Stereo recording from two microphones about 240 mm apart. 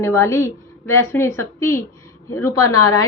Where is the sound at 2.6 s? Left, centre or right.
Left.